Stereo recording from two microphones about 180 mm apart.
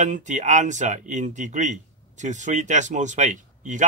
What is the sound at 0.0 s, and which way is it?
Speech, 45° right (ahead or behind).